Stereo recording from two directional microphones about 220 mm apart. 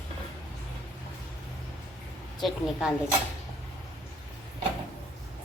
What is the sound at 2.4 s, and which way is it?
Speech, 5° right (ahead or behind).